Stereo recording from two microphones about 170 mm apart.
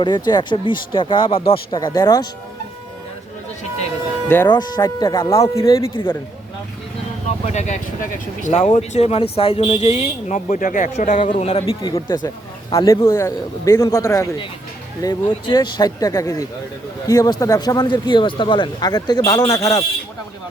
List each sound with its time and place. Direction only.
0.0 s speech: 25° left (ahead or behind)
4.4 s speech: 25° left (ahead or behind)
7.4 s speech: 40° left (ahead or behind)
11.2 s speech: 35° left (ahead or behind)
11.8 s speech: 25° left (ahead or behind)